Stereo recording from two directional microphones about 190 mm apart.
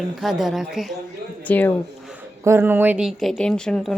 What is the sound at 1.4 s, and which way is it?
Speech, 10° left (ahead or behind).